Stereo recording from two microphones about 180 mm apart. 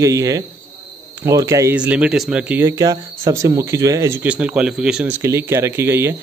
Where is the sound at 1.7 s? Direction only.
5° right (ahead or behind).